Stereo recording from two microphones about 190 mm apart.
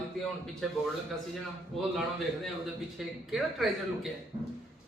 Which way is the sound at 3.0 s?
Centre (ahead or behind).